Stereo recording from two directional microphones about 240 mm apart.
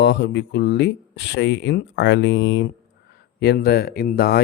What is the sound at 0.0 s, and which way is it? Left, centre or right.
Speech, left.